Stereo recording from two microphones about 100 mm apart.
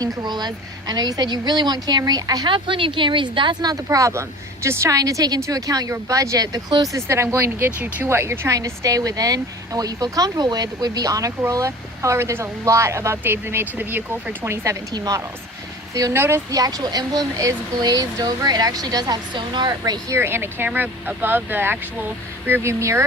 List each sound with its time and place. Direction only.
0.0 s a woman's voice: 45° right (ahead or behind)
2.5 s speech: 60° right (ahead or behind)
3.8 s speech: 30° right (ahead or behind)
6.9 s speech: 30° right (ahead or behind)
14.9 s speech: 40° right (ahead or behind)
16.1 s speech: 25° right (ahead or behind)
16.5 s speech: 40° right (ahead or behind)
20.1 s speech: 25° right (ahead or behind)